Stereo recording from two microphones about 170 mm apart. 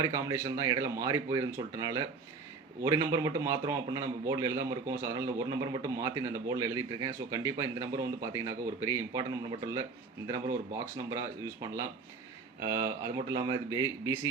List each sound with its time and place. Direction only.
0.0 s a man's voice: 20° right (ahead or behind)
10.2 s a man's voice: 20° right (ahead or behind)